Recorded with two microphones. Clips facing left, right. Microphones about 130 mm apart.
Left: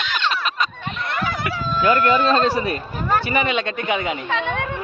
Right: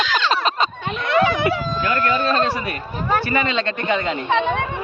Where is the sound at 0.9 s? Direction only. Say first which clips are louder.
Right 8 dB; 90° right.